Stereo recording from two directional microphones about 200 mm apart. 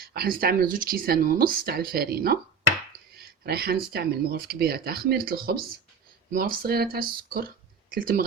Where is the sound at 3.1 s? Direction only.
50° right (ahead or behind).